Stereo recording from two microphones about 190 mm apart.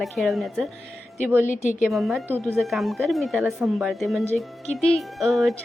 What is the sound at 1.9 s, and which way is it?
A woman's voice, centre (ahead or behind).